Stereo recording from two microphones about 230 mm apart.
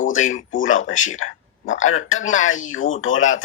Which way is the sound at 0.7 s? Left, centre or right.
Left.